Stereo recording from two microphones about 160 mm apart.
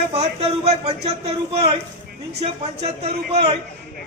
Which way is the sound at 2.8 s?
40° right (ahead or behind).